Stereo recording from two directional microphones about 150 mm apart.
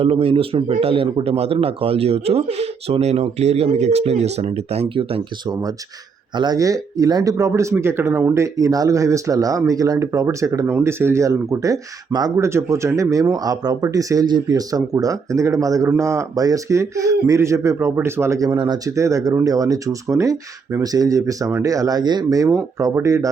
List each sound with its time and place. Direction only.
0.0 s a man's voice: 40° right (ahead or behind)
6.3 s speech: 30° right (ahead or behind)